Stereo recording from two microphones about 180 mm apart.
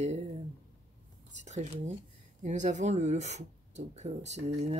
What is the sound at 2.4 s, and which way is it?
Speech, 40° right (ahead or behind).